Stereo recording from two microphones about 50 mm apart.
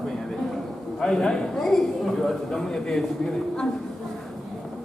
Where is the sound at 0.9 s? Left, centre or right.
Centre.